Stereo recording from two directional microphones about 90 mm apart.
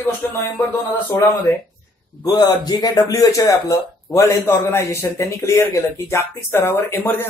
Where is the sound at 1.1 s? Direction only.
35° left (ahead or behind).